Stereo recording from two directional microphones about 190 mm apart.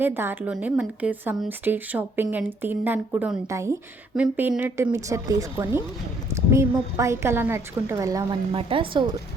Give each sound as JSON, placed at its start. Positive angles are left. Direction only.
{"t": 0.0, "sound": "speech", "side_deg": -10}